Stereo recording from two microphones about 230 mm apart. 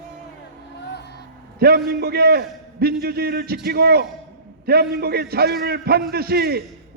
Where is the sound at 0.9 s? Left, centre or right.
Left.